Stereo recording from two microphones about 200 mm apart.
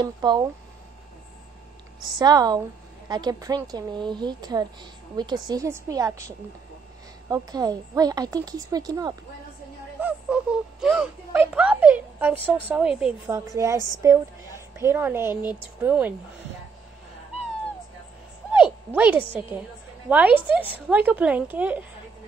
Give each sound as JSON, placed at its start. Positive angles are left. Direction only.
{"t": 0.0, "sound": "a woman's voice", "side_deg": -20}
{"t": 2.1, "sound": "a woman's voice", "side_deg": -20}
{"t": 9.9, "sound": "a woman's voice", "side_deg": -5}
{"t": 18.5, "sound": "a sound", "side_deg": -10}
{"t": 20.1, "sound": "a woman's voice", "side_deg": -10}